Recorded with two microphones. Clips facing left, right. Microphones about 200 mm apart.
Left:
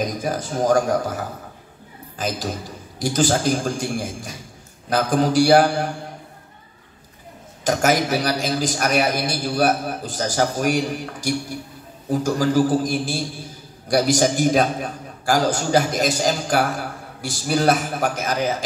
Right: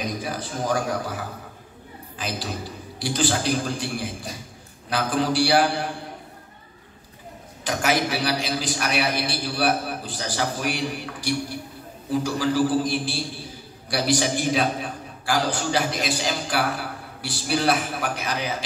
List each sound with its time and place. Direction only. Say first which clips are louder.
0.0 s a man's voice: left 5 dB; 45° left (ahead or behind)
7.6 s a man's voice: left 4 dB; 45° left (ahead or behind)